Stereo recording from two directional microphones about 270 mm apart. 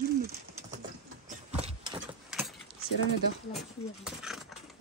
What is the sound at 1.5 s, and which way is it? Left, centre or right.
Vehicle, right.